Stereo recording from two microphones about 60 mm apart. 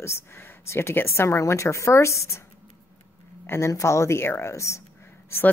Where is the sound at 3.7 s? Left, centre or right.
Left.